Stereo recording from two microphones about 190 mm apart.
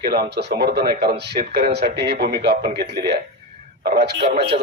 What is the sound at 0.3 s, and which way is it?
A man's voice, 60° right (ahead or behind).